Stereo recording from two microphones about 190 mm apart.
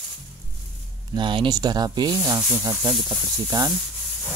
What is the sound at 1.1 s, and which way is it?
Speech, 25° right (ahead or behind).